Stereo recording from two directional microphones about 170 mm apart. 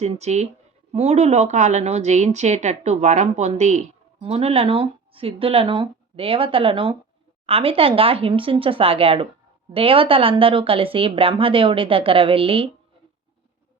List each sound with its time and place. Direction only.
0.0 s speech: 40° right (ahead or behind)